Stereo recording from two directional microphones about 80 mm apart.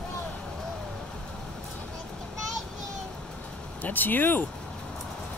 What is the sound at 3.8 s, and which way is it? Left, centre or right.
Speech, left.